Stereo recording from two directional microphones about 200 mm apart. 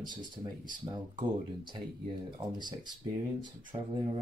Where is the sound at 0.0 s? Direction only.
20° right (ahead or behind).